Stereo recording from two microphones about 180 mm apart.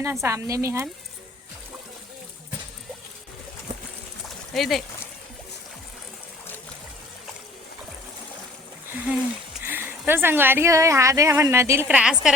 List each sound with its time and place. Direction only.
0.0 s speech: 15° right (ahead or behind)
4.5 s speech: centre (ahead or behind)
9.6 s speech: 10° right (ahead or behind)